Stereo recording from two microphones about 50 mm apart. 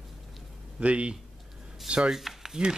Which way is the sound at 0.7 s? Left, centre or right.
Right.